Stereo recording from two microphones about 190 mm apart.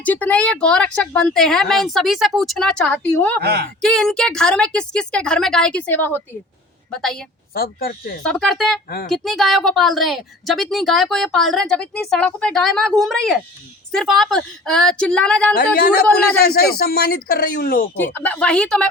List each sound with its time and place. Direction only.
0.0 s speech: 10° left (ahead or behind)
3.4 s speech: 60° right (ahead or behind)
3.8 s speech: centre (ahead or behind)
7.5 s speech: 50° left (ahead or behind)
8.2 s speech: 5° left (ahead or behind)
15.5 s speech: 55° left (ahead or behind)
17.9 s speech: 10° left (ahead or behind)